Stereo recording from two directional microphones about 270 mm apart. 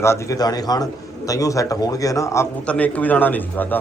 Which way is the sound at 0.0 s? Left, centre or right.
Centre.